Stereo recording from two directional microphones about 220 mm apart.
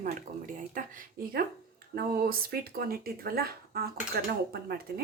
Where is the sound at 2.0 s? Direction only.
40° right (ahead or behind).